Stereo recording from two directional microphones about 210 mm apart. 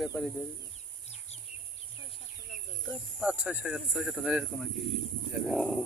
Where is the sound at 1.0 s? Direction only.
30° left (ahead or behind).